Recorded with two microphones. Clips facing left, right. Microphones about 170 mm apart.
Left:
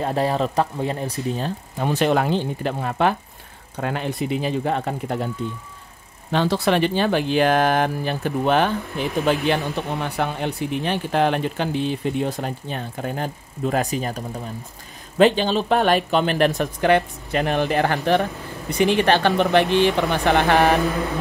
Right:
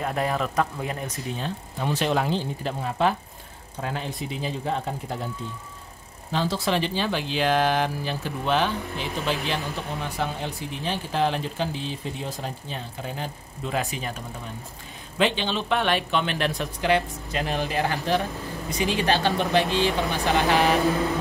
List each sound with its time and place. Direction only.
0.0 s speech: 30° left (ahead or behind)
1.8 s speech: 55° left (ahead or behind)
6.3 s speech: 65° left (ahead or behind)